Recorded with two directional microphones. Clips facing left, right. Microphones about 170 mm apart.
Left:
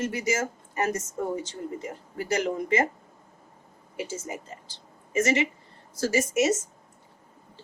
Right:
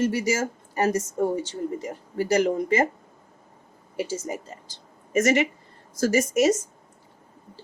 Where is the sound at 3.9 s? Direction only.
35° right (ahead or behind).